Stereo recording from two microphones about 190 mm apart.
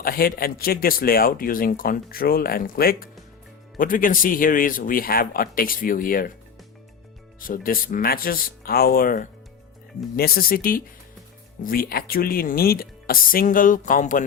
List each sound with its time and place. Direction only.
0.0 s speech: 50° left (ahead or behind)
7.3 s speech: 45° left (ahead or behind)